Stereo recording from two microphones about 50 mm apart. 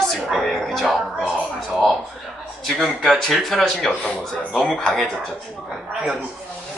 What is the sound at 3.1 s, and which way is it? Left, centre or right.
A man's voice, centre.